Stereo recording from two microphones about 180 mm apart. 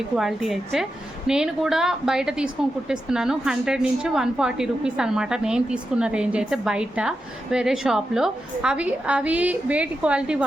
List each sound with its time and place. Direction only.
0.2 s a woman's voice: centre (ahead or behind)